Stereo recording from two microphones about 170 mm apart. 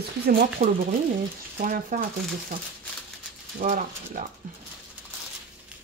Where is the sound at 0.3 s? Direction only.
65° right (ahead or behind).